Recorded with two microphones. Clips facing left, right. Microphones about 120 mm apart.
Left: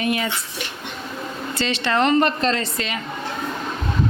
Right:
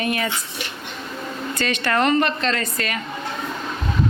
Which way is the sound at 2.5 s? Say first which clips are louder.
Even; 25° left (ahead or behind).